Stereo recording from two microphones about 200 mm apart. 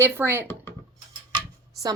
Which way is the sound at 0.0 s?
10° right (ahead or behind).